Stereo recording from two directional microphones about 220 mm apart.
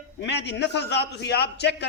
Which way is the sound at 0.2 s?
50° left (ahead or behind).